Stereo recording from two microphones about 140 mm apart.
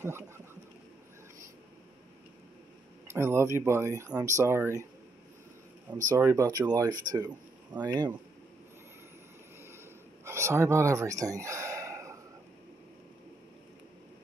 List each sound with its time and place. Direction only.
3.1 s speech: 20° right (ahead or behind)
6.1 s speech: 20° right (ahead or behind)
10.2 s a sound: 20° right (ahead or behind)